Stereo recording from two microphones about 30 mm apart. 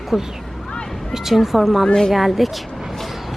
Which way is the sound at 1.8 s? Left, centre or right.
Left.